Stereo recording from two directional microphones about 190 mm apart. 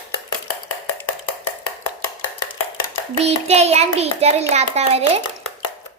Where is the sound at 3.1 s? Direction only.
30° right (ahead or behind).